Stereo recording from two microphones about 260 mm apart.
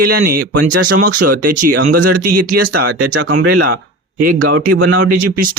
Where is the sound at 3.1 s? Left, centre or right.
Right.